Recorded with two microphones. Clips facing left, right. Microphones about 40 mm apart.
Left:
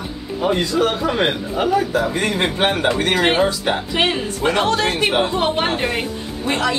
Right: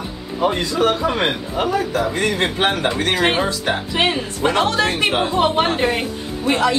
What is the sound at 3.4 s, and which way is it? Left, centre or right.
Speech, left.